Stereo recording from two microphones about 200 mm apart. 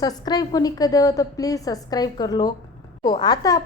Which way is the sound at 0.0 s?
20° left (ahead or behind).